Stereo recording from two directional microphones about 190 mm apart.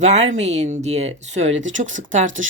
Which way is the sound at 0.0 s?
35° right (ahead or behind).